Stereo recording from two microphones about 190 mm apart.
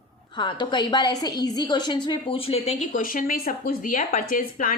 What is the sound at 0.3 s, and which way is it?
A woman's voice, 25° left (ahead or behind).